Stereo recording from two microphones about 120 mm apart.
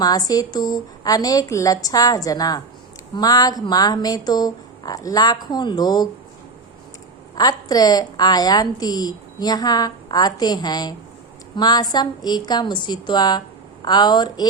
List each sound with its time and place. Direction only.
0.0 s a woman's voice: 30° left (ahead or behind)
7.3 s a woman's voice: 35° left (ahead or behind)